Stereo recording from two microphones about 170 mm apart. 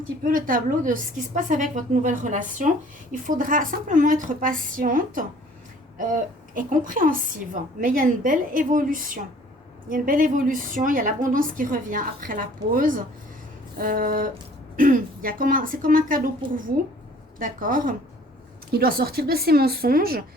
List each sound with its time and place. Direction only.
0.3 s a woman's voice: 55° right (ahead or behind)